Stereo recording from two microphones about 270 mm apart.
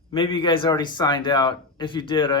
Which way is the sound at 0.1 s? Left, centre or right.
Centre.